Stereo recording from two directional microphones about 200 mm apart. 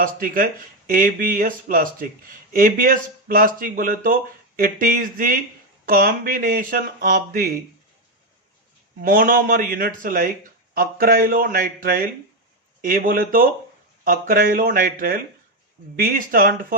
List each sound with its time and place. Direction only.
0.0 s speech: 45° right (ahead or behind)
9.0 s speech: 45° right (ahead or behind)